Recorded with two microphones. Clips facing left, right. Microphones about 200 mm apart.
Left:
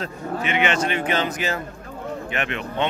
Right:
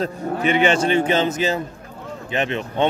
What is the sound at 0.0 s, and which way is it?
Speech, 35° right (ahead or behind).